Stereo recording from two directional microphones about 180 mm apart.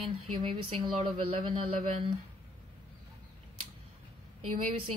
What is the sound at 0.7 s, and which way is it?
A woman's voice, 30° right (ahead or behind).